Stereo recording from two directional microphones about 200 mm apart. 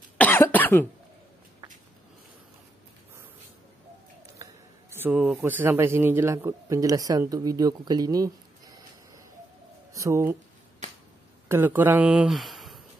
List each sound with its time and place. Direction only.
0.2 s cough: 10° left (ahead or behind)
4.4 s speech: 10° right (ahead or behind)
10.8 s a sound: 35° right (ahead or behind)
11.4 s speech: 10° right (ahead or behind)